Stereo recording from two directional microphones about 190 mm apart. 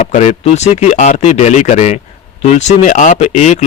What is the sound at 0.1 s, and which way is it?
Speech, 40° left (ahead or behind).